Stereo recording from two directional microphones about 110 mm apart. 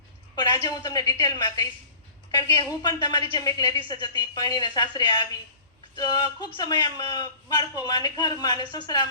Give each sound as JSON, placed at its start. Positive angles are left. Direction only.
{"t": 0.7, "sound": "a woman's voice", "side_deg": 35}